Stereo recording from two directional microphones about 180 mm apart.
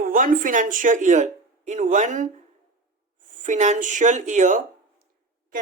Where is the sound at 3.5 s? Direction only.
40° right (ahead or behind).